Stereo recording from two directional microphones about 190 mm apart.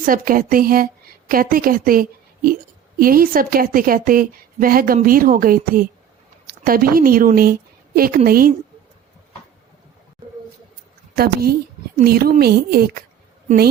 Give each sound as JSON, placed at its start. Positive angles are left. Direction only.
{"t": 0.0, "sound": "a woman's voice", "side_deg": -50}
{"t": 11.1, "sound": "a woman's voice", "side_deg": -55}